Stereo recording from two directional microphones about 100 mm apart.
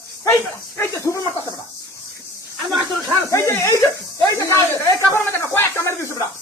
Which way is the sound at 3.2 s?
30° left (ahead or behind).